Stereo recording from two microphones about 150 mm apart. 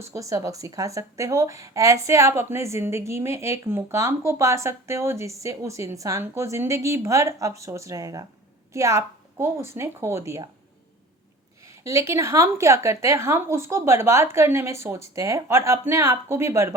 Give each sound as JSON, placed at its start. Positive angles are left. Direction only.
{"t": 0.0, "sound": "a woman's voice", "side_deg": -20}
{"t": 11.6, "sound": "a woman's voice", "side_deg": -20}